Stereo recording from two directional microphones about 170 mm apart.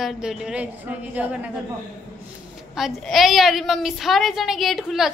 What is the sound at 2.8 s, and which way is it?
A woman's voice, centre (ahead or behind).